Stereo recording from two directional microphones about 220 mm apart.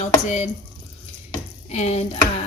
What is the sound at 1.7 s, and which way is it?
Speech, 30° left (ahead or behind).